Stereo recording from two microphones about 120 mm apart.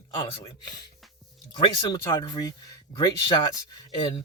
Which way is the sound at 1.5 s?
35° left (ahead or behind).